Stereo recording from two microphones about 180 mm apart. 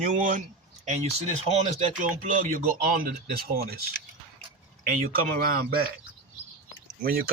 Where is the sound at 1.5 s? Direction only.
40° right (ahead or behind); by 3.7 s 55° right (ahead or behind).